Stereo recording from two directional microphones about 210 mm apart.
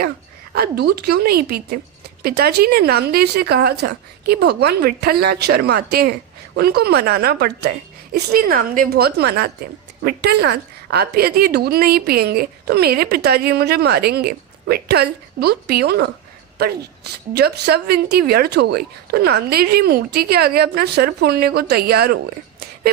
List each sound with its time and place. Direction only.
0.5 s a woman's voice: 50° right (ahead or behind)